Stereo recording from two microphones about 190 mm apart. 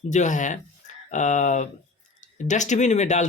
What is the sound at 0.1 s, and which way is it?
Speech, 40° left (ahead or behind).